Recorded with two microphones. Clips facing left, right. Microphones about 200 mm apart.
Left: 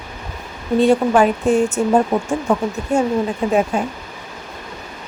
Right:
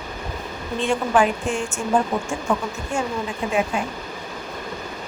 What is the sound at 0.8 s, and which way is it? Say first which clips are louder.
A woman's voice: left 6 dB; 40° left (ahead or behind).